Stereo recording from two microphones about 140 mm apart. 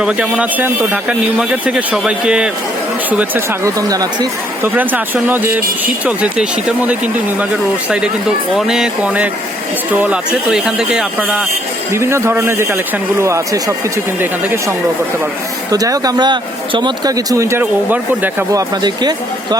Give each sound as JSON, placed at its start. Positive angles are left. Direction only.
{"t": 0.0, "sound": "speech", "side_deg": -10}
{"t": 4.6, "sound": "speech", "side_deg": -10}
{"t": 8.5, "sound": "speech", "side_deg": -5}
{"t": 18.5, "sound": "speech", "side_deg": -30}